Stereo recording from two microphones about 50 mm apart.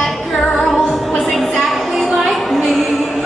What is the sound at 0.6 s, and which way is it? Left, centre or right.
Music, centre.